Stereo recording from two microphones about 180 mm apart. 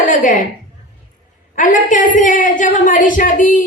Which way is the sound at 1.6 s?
45° left (ahead or behind).